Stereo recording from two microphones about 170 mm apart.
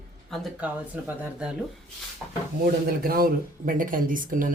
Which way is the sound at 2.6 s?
65° right (ahead or behind).